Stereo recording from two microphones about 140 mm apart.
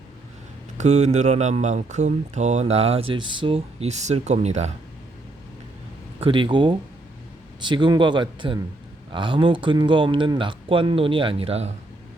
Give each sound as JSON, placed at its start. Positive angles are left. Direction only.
{"t": 0.8, "sound": "speech", "side_deg": -55}
{"t": 6.1, "sound": "speech", "side_deg": -35}